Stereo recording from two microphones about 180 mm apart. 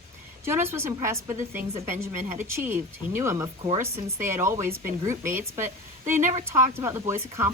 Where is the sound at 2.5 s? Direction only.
15° right (ahead or behind).